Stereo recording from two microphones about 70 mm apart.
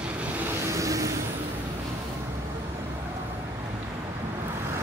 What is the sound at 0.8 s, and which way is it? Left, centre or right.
Vehicle, right.